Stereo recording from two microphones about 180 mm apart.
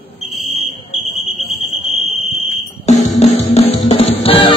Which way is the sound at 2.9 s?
40° left (ahead or behind).